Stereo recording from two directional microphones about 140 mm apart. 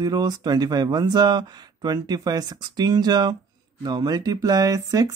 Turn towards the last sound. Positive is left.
turn(degrees=-25)  # may be behind; listen again after turning